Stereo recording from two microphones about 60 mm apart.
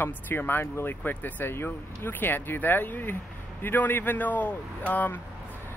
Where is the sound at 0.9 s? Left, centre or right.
Left.